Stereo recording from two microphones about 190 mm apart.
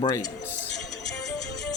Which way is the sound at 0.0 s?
20° left (ahead or behind).